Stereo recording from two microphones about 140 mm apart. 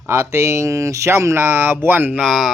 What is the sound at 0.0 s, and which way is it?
Speech, 20° right (ahead or behind).